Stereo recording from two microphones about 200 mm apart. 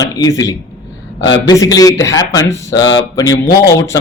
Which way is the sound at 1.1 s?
65° left (ahead or behind).